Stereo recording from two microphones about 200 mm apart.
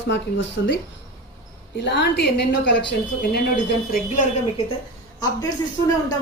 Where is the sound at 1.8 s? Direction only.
60° left (ahead or behind).